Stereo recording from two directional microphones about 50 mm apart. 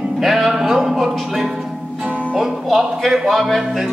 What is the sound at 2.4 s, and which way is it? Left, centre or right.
Speech, centre.